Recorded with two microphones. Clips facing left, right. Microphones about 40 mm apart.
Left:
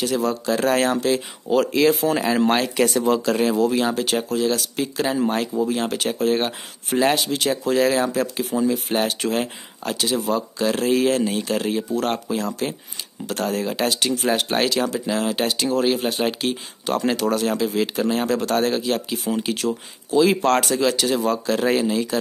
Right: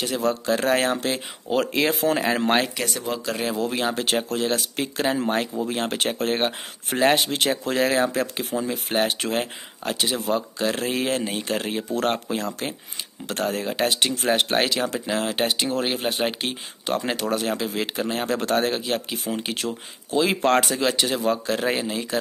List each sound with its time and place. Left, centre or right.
0.5 s speech: centre
1.0 s speech: right
3.1 s speech: centre
3.4 s speech: centre
6.4 s speech: centre
7.8 s speech: centre